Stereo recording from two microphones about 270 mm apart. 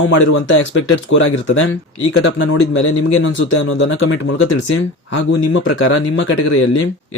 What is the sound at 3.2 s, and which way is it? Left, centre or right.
Speech, left.